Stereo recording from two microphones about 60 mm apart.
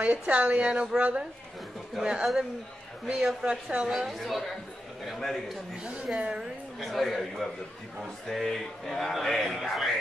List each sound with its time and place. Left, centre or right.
0.0 s a woman's voice: right; by 5.4 s centre
6.1 s a woman's voice: centre
6.8 s a man's voice: centre